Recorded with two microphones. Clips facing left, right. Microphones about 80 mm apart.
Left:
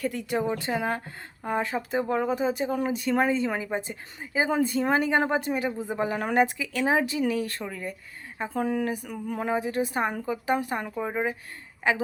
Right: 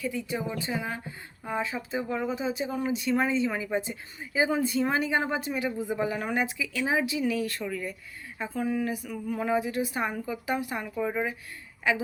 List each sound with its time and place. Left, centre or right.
0.0 s a woman's voice: left
8.6 s speech: left
10.9 s speech: left